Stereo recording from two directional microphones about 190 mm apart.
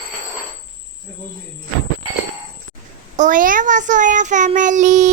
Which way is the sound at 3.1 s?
45° right (ahead or behind).